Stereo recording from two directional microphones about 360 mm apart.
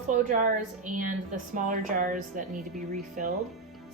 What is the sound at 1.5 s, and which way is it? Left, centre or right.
Speech, right.